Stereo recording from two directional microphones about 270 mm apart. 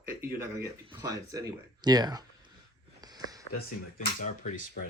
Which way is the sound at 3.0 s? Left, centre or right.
Centre.